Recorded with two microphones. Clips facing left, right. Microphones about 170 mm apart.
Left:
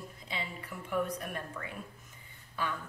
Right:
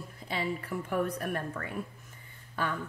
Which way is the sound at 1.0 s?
55° right (ahead or behind).